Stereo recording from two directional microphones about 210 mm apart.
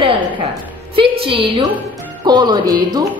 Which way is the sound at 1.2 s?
25° right (ahead or behind).